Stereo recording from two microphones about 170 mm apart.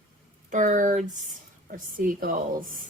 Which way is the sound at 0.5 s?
50° right (ahead or behind).